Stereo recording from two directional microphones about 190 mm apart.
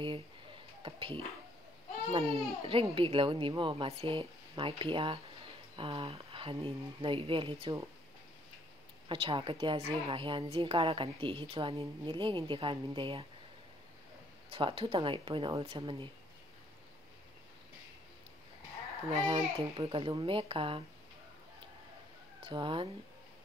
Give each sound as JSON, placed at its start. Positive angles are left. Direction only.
{"t": 0.8, "sound": "a woman's voice", "side_deg": -25}
{"t": 9.1, "sound": "a woman's voice", "side_deg": -30}
{"t": 14.5, "sound": "a woman's voice", "side_deg": -30}
{"t": 19.1, "sound": "a woman's voice", "side_deg": -25}
{"t": 22.4, "sound": "a woman's voice", "side_deg": -25}